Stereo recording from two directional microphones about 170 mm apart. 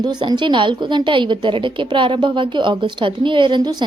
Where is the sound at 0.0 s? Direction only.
25° right (ahead or behind).